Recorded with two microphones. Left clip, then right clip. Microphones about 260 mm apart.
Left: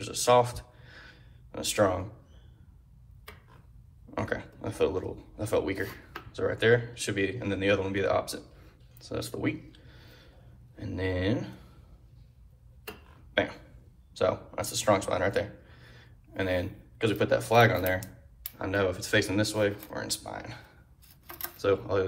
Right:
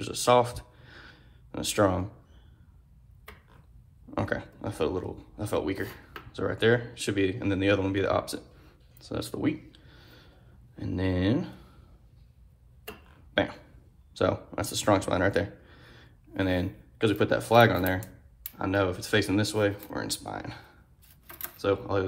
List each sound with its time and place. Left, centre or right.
0.0 s a sound: centre
4.1 s speech: centre
13.3 s burping: centre
14.1 s speech: right
15.6 s a sound: right
18.5 s speech: centre